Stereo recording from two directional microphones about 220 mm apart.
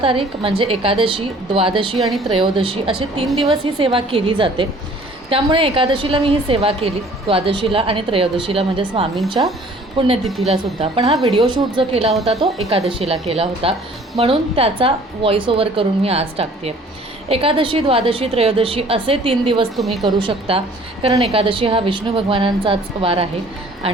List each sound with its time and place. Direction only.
0.0 s a woman's voice: 25° right (ahead or behind)
2.0 s a woman's voice: centre (ahead or behind)
2.2 s a woman's voice: 25° right (ahead or behind)
10.2 s a woman's voice: centre (ahead or behind)
10.5 s a woman's voice: 25° right (ahead or behind)
19.7 s a woman's voice: centre (ahead or behind)
20.1 s a woman's voice: 20° right (ahead or behind)